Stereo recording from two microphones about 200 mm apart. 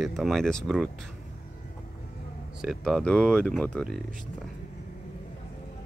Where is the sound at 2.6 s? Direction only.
Centre (ahead or behind).